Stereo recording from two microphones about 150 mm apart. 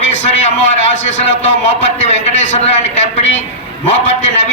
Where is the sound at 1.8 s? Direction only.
50° left (ahead or behind).